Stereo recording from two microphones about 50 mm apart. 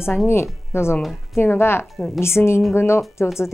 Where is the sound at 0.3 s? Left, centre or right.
Left.